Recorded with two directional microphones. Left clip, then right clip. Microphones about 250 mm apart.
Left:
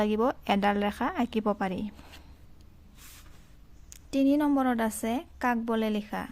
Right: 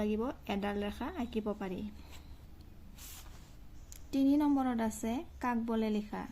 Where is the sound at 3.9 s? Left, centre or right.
Left.